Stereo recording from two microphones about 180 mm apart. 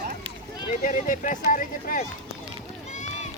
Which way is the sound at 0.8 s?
50° left (ahead or behind).